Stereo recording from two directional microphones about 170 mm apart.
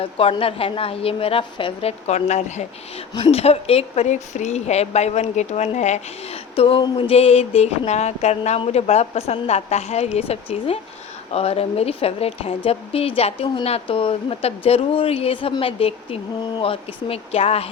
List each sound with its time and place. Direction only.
0.0 s a woman's voice: 30° left (ahead or behind)